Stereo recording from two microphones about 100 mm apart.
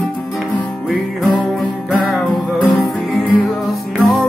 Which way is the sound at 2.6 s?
Centre (ahead or behind).